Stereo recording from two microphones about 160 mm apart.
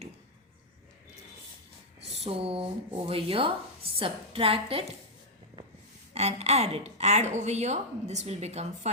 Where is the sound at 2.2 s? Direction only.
35° right (ahead or behind).